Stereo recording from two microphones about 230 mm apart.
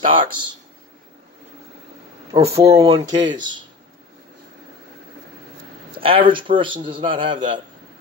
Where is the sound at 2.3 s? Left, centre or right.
Centre.